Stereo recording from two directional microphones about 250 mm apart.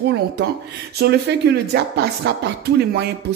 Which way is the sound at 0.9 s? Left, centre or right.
Right.